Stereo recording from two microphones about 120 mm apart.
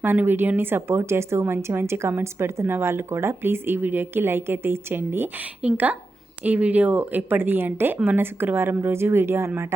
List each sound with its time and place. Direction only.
0.0 s speech: 15° right (ahead or behind)